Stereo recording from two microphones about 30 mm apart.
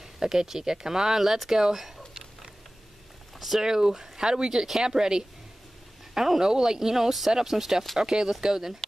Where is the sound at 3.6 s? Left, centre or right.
Right.